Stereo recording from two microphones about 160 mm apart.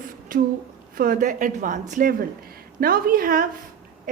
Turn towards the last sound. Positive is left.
turn(degrees=-60)  # may be behind; listen again after turning